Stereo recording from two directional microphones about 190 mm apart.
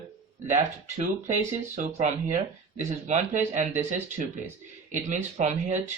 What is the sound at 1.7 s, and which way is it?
Speech, 40° right (ahead or behind).